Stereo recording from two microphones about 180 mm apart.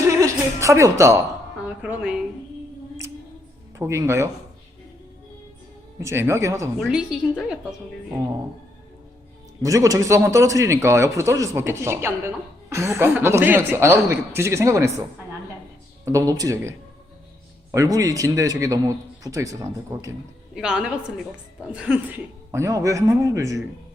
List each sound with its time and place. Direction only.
0.1 s music: 15° right (ahead or behind)
1.6 s a man's voice: 10° right (ahead or behind)
3.8 s a man's voice: 15° right (ahead or behind)
6.0 s a man's voice: 15° right (ahead or behind)
6.7 s a woman's voice: centre (ahead or behind)
9.6 s a man's voice: 20° right (ahead or behind)
16.0 s a man's voice: 20° right (ahead or behind)
20.6 s a woman's voice: 5° right (ahead or behind)